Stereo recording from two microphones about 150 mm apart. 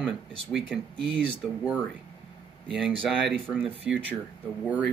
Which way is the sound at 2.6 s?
Centre (ahead or behind).